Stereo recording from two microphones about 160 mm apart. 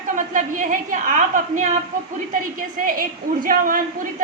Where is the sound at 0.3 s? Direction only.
55° right (ahead or behind).